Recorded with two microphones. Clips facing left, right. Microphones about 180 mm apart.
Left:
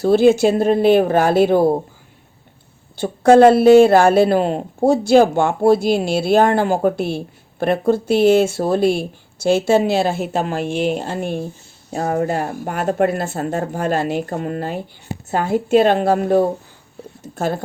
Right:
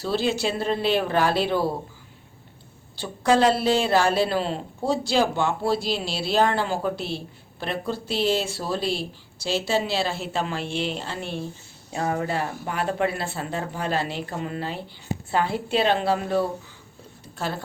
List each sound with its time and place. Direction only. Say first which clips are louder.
0.0 s a woman's voice: left 12 dB; 50° left (ahead or behind)
3.0 s a woman's voice: left 10 dB; 50° left (ahead or behind)